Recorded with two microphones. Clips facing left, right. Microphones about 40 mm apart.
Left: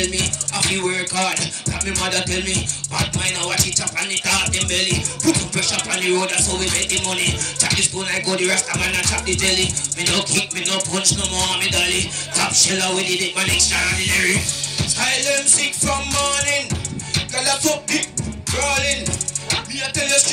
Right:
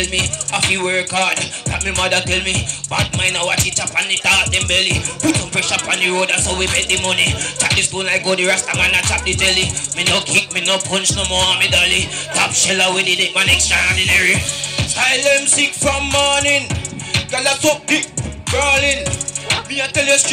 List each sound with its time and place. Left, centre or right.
0.1 s music: right